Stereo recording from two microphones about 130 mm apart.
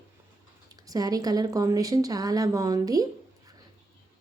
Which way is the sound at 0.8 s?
30° right (ahead or behind).